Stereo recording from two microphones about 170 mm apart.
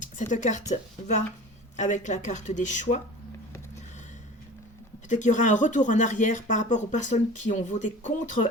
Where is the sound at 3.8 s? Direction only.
45° left (ahead or behind).